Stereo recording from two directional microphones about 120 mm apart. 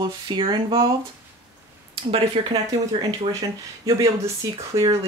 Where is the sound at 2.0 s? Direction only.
50° right (ahead or behind).